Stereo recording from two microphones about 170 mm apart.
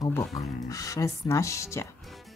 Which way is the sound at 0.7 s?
20° left (ahead or behind).